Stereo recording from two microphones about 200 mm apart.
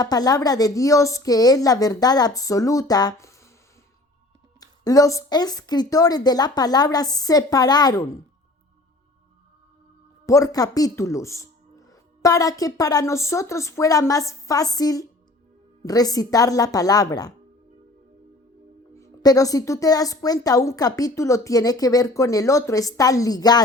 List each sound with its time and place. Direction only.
0.0 s speech: 20° left (ahead or behind)
4.6 s a woman's voice: 20° left (ahead or behind)
10.2 s speech: 15° left (ahead or behind)
18.9 s speech: 15° left (ahead or behind)